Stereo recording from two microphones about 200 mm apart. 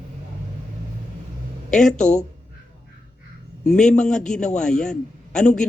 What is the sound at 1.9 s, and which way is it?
Speech, 40° left (ahead or behind).